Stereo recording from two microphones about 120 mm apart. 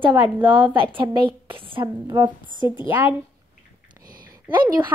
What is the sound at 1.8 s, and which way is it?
Speech, 30° right (ahead or behind).